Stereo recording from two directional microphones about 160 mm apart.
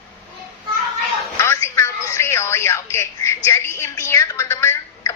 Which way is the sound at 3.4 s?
15° left (ahead or behind).